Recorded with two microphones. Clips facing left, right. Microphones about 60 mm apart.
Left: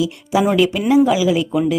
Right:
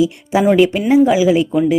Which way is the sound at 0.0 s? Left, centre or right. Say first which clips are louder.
Right 3 dB; right.